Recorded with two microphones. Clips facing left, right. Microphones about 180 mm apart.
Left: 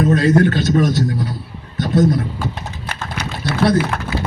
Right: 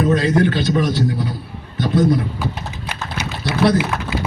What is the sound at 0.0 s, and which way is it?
A man's voice, 45° left (ahead or behind).